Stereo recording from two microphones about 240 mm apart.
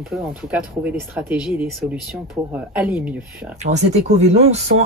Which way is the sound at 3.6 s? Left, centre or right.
Right.